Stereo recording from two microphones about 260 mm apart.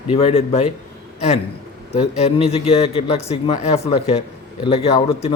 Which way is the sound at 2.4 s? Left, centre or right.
Left.